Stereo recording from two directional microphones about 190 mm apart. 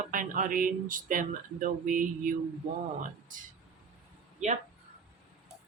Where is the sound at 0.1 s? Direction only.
45° right (ahead or behind).